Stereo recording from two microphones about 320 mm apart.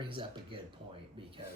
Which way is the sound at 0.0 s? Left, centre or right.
Centre.